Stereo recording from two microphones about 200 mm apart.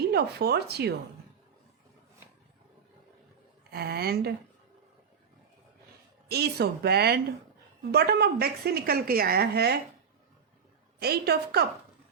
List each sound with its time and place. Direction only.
0.1 s speech: 55° right (ahead or behind)
3.7 s a woman's voice: 50° right (ahead or behind)
6.2 s a woman's voice: 55° right (ahead or behind)
11.0 s a woman's voice: 50° right (ahead or behind)